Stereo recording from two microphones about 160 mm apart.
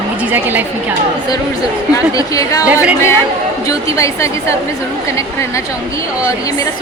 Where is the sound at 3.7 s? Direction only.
20° left (ahead or behind).